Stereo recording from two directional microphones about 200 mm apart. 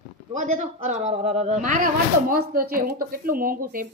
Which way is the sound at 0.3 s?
40° right (ahead or behind).